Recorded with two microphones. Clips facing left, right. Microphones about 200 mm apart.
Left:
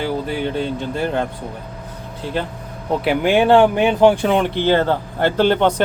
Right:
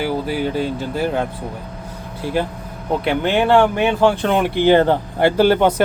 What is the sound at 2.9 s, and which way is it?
Speech, 5° left (ahead or behind).